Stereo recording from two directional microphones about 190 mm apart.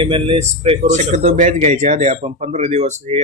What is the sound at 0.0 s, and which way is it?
A man's voice, 25° right (ahead or behind).